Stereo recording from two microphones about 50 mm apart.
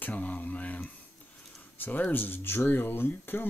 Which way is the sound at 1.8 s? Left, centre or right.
Left.